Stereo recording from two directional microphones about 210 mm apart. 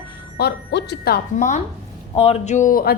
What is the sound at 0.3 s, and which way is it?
A woman's voice, 50° left (ahead or behind).